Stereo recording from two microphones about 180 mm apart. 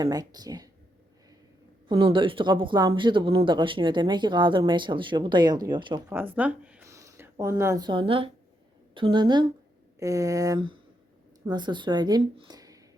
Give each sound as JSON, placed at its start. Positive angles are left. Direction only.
{"t": 0.0, "sound": "speech", "side_deg": -20}
{"t": 1.9, "sound": "speech", "side_deg": -30}
{"t": 6.1, "sound": "speech", "side_deg": -10}